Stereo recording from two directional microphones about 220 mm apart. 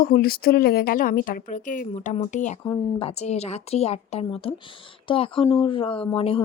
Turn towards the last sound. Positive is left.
turn(degrees=25)  # may be behind; listen again after turning